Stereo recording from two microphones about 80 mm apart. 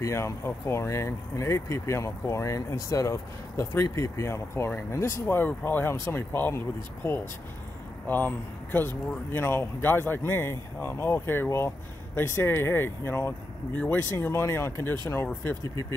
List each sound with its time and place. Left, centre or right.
0.0 s speech: left
15.6 s speech: left